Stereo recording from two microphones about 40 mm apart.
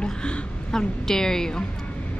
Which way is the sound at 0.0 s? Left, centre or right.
Left.